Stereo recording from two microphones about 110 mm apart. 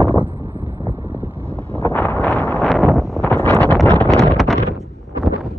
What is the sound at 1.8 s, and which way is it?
Wind noise, 15° left (ahead or behind).